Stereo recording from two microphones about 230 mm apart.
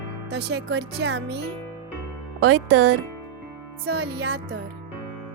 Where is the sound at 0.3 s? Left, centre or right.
Right.